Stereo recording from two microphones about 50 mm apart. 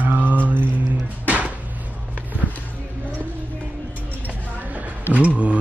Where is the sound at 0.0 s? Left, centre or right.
Right.